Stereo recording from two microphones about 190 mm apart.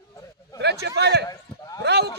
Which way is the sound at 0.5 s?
60° right (ahead or behind).